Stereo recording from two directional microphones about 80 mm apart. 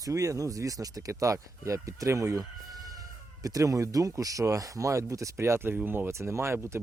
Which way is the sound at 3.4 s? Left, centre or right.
Right.